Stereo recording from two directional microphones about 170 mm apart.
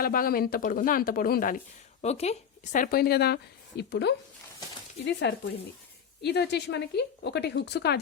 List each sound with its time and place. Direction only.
0.0 s speech: 55° left (ahead or behind); by 2.3 s 40° left (ahead or behind)
2.7 s speech: 60° left (ahead or behind); by 4.1 s 80° left
5.3 s speech: 85° left